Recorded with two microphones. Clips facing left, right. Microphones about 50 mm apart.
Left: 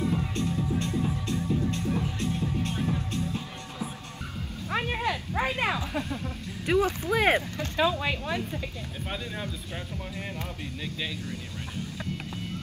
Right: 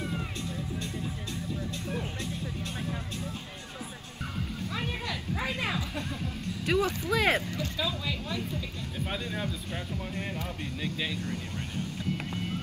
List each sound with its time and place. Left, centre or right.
0.1 s music: left
4.6 s a sound: left
6.6 s speech: left
7.5 s speech: left
9.1 s speech: centre